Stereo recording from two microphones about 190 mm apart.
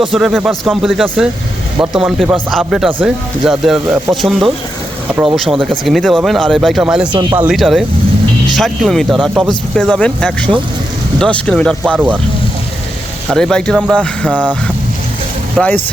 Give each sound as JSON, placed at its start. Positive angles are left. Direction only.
{"t": 0.1, "sound": "speech", "side_deg": 0}
{"t": 5.1, "sound": "speech", "side_deg": -10}
{"t": 5.4, "sound": "speech", "side_deg": 0}
{"t": 7.1, "sound": "speech", "side_deg": -25}
{"t": 7.3, "sound": "speech", "side_deg": -5}
{"t": 11.9, "sound": "speech", "side_deg": -5}
{"t": 13.3, "sound": "speech", "side_deg": 5}
{"t": 15.5, "sound": "speech", "side_deg": 10}